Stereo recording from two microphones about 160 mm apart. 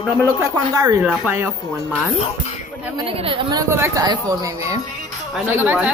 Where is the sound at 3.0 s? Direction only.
35° right (ahead or behind); by 5.9 s 10° right (ahead or behind).